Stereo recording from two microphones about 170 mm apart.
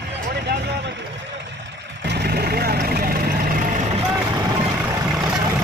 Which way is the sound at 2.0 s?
80° right.